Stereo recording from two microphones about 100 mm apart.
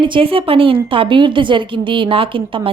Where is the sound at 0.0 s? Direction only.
60° right (ahead or behind).